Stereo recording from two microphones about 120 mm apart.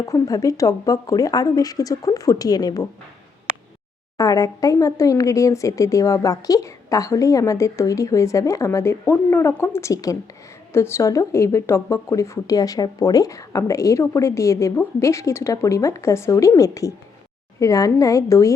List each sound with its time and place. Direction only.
0.0 s speech: 30° left (ahead or behind)
4.2 s speech: 30° left (ahead or behind)